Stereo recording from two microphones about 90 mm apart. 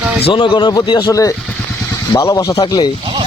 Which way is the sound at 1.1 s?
40° left (ahead or behind).